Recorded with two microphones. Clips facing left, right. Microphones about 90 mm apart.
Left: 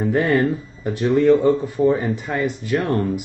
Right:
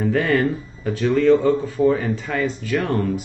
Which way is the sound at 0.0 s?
20° left (ahead or behind).